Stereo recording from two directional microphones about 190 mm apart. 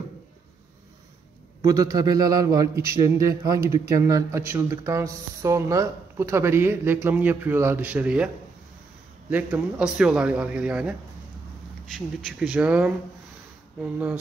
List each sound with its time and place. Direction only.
1.6 s speech: 15° right (ahead or behind)
9.3 s a man's voice: 5° right (ahead or behind)